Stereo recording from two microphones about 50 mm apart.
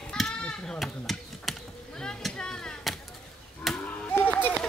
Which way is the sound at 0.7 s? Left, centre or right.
Centre.